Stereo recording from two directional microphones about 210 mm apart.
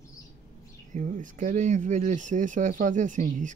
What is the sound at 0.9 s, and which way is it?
Speech, 40° right (ahead or behind).